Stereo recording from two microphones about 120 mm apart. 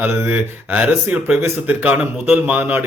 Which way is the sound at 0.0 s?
15° right (ahead or behind).